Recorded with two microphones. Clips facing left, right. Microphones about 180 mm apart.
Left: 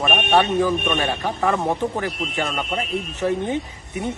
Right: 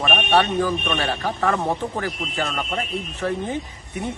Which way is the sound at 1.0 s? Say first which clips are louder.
Left 1 dB; 15° left (ahead or behind).